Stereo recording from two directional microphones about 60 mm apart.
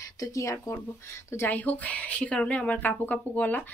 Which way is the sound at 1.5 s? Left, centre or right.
Left.